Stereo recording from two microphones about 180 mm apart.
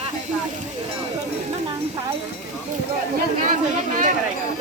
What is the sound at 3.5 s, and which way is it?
Speech, 45° right (ahead or behind).